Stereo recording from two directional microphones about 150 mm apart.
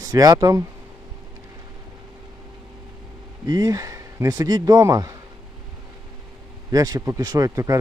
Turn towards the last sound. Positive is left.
turn(degrees=-20)  # may be behind; listen again after turning